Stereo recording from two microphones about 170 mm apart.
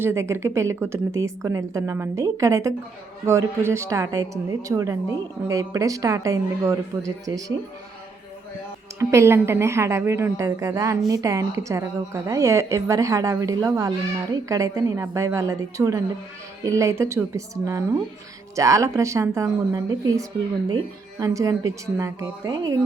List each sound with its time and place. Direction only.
0.0 s a woman's voice: 15° right (ahead or behind)
9.0 s a woman's voice: 15° right (ahead or behind)